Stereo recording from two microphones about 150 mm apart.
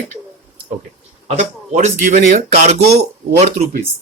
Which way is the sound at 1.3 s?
50° right (ahead or behind).